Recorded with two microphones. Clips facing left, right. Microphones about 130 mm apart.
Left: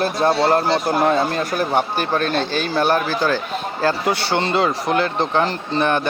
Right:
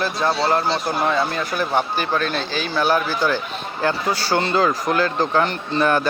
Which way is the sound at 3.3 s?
20° right (ahead or behind).